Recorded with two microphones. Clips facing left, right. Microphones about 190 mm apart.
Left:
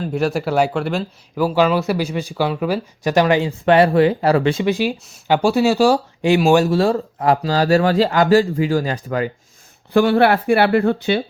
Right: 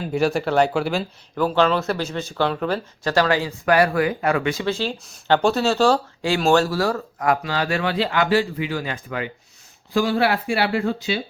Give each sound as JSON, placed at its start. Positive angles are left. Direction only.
{"t": 0.0, "sound": "speech", "side_deg": 0}
{"t": 4.6, "sound": "speech", "side_deg": 15}
{"t": 6.7, "sound": "speech", "side_deg": 25}
{"t": 9.9, "sound": "speech", "side_deg": 60}